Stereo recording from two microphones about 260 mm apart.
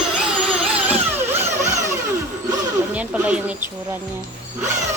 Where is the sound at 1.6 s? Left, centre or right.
Right.